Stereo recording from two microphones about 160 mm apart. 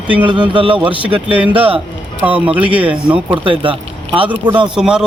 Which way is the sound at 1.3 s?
30° right (ahead or behind).